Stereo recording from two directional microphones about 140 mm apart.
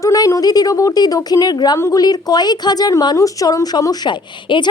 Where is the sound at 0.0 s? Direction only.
25° left (ahead or behind).